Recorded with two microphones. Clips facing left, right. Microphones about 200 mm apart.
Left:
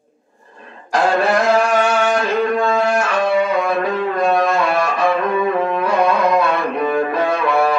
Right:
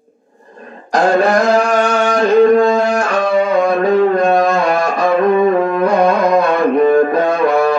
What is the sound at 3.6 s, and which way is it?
Music, 40° right (ahead or behind).